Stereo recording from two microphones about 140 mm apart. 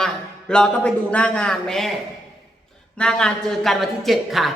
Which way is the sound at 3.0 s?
5° left (ahead or behind).